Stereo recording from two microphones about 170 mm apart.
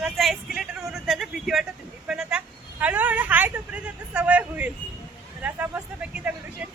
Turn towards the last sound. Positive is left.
turn(degrees=-5)  # may be behind; listen again after turning